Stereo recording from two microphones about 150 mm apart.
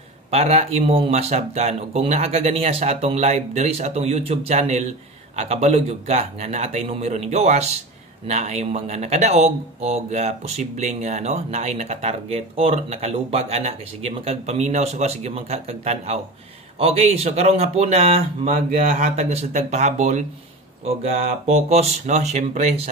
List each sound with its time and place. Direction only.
0.3 s speech: 45° right (ahead or behind)